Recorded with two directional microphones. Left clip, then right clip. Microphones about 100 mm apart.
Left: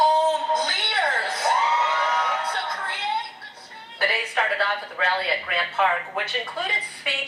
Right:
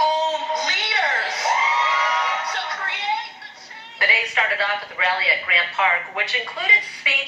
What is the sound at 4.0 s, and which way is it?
A woman's voice, 20° left (ahead or behind).